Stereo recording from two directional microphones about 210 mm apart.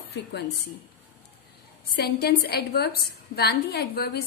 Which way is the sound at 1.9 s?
50° left (ahead or behind).